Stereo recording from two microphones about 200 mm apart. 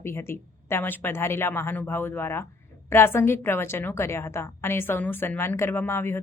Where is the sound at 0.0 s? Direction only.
10° left (ahead or behind).